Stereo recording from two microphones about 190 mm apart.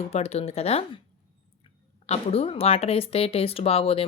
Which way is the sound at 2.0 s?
35° left (ahead or behind).